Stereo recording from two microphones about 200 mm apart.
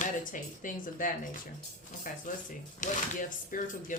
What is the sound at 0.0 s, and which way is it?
Speech, 40° left (ahead or behind).